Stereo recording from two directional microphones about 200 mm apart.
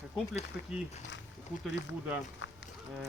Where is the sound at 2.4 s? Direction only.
65° left (ahead or behind).